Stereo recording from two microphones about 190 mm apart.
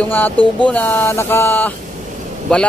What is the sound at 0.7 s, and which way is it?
A man's voice, 10° left (ahead or behind).